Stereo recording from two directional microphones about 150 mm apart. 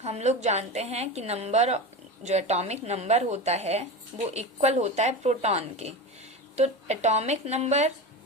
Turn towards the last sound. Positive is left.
turn(degrees=-50)  # may be behind; listen again after turning